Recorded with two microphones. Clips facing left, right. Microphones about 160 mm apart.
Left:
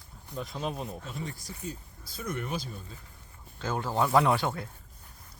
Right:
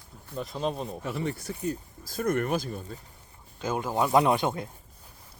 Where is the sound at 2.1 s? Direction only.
55° right (ahead or behind).